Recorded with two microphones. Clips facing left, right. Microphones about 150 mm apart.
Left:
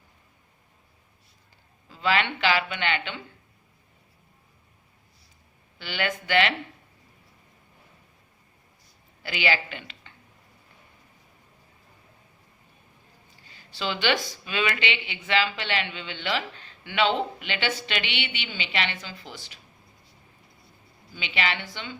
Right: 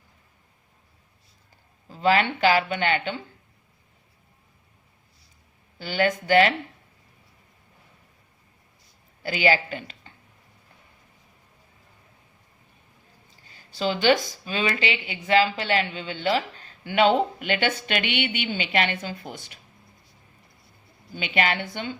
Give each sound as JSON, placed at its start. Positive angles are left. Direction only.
{"t": 1.9, "sound": "speech", "side_deg": -40}
{"t": 5.8, "sound": "a woman's voice", "side_deg": -40}
{"t": 9.2, "sound": "a woman's voice", "side_deg": -40}
{"t": 13.5, "sound": "speech", "side_deg": -45}
{"t": 21.1, "sound": "speech", "side_deg": -50}